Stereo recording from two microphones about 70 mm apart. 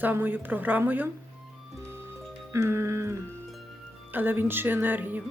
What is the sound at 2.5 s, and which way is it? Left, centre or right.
Music, right.